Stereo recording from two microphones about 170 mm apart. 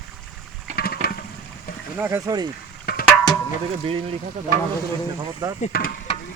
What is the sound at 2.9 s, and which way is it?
Music, 65° left (ahead or behind).